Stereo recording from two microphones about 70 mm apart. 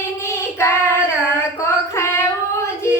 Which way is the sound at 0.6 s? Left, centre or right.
Left.